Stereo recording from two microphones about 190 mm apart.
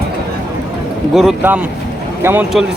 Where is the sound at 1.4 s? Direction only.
10° right (ahead or behind).